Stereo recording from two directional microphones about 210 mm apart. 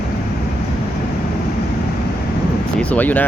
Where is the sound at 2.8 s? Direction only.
10° left (ahead or behind).